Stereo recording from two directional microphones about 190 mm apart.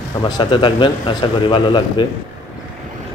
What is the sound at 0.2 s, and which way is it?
A man's voice, 25° left (ahead or behind).